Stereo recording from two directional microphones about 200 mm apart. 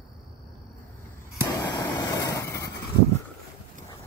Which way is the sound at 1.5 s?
20° left (ahead or behind).